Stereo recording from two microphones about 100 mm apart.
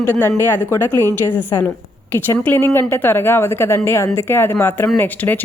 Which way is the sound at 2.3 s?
25° left (ahead or behind).